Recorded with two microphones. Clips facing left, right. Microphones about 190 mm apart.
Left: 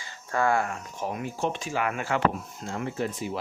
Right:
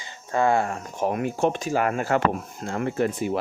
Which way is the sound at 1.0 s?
60° right (ahead or behind).